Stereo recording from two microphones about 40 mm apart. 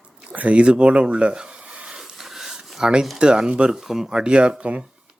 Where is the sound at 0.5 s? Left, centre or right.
Right.